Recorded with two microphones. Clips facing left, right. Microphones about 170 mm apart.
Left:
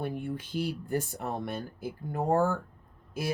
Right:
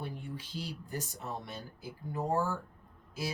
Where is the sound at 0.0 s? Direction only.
55° left (ahead or behind).